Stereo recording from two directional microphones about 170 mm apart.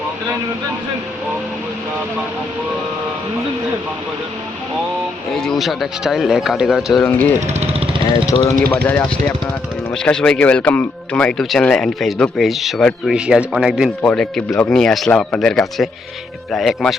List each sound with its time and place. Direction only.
5.3 s speech: 5° left (ahead or behind)
7.4 s vehicle: 40° right (ahead or behind)
8.0 s speech: 20° left (ahead or behind)
8.7 s speech: 10° left (ahead or behind)